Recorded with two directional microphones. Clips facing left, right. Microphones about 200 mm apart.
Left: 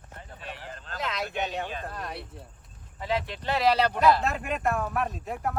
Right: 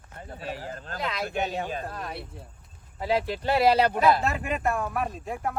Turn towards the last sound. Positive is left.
turn(degrees=0)  # may be behind; listen again after turning